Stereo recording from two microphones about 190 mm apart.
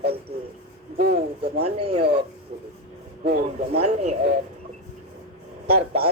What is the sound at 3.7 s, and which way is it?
Speech, 35° right (ahead or behind).